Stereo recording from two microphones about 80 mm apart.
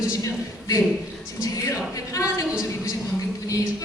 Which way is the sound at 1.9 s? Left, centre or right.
Left.